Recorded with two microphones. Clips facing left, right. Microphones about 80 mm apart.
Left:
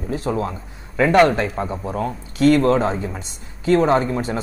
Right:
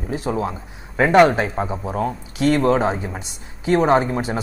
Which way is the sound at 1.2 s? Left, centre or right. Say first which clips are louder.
Right 3 dB; centre.